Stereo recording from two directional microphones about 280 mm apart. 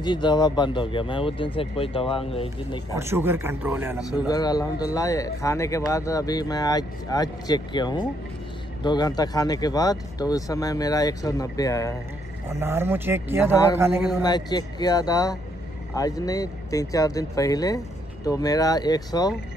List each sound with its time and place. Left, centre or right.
0.0 s speech: centre
2.9 s speech: centre
4.3 s speech: centre
12.4 s speech: centre
14.2 s speech: centre